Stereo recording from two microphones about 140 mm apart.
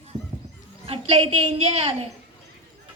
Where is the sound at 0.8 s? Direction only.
40° right (ahead or behind).